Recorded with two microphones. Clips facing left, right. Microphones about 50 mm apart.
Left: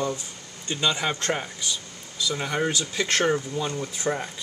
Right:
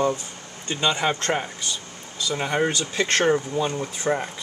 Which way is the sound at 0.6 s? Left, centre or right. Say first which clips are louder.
Right 3 dB; centre.